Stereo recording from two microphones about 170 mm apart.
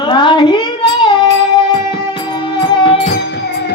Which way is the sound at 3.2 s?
90° left.